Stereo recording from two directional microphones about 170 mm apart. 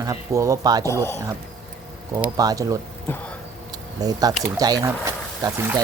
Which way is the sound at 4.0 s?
20° right (ahead or behind).